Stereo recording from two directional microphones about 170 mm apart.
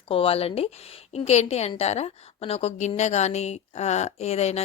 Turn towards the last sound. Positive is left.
turn(degrees=40)  # may be behind; listen again after turning